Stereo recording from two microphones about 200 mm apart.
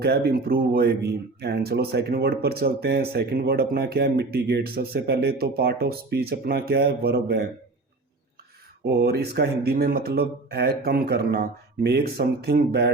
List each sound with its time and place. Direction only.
0.0 s speech: 55° right (ahead or behind)
8.8 s speech: 55° right (ahead or behind)